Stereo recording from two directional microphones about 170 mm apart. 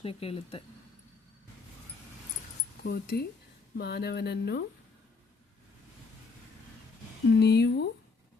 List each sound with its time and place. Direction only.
0.0 s speech: 35° left (ahead or behind)
2.8 s speech: 65° left (ahead or behind)
7.3 s speech: 80° left